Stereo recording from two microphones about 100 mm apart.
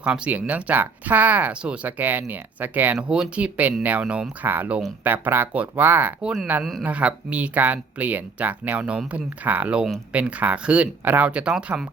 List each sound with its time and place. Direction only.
0.0 s speech: 15° right (ahead or behind)